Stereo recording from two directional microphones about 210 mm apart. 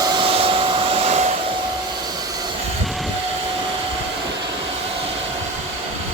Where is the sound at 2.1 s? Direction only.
20° right (ahead or behind).